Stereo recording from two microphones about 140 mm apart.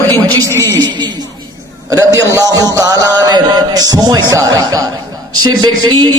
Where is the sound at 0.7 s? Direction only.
30° right (ahead or behind).